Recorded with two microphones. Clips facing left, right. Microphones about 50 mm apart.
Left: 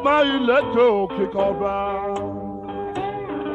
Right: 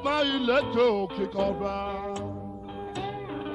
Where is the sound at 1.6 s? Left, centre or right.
Left.